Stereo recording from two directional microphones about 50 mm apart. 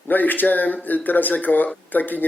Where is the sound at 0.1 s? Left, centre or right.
Left.